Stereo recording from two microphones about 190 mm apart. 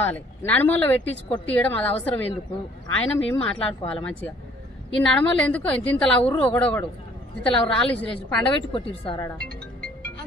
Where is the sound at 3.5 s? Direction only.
30° left (ahead or behind).